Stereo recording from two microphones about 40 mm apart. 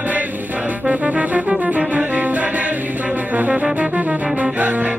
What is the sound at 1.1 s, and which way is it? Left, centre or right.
Music, right.